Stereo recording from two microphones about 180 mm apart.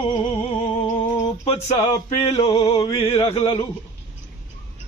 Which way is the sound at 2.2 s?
35° left (ahead or behind).